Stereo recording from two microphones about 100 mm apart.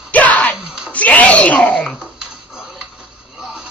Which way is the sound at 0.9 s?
15° left (ahead or behind).